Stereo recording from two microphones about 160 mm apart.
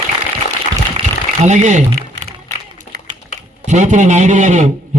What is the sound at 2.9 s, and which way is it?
Typing, 90° right.